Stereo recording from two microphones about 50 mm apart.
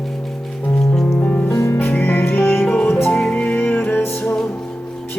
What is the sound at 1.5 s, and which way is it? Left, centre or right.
Music, left.